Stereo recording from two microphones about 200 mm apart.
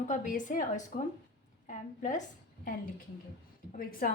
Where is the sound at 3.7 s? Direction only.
45° left (ahead or behind).